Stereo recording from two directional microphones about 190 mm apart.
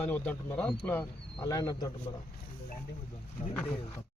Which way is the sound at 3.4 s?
35° left (ahead or behind).